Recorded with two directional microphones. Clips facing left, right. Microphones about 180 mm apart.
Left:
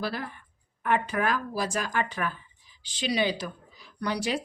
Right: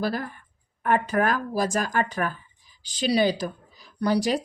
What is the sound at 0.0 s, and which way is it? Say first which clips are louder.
A woman's voice: right 5 dB; 45° right (ahead or behind).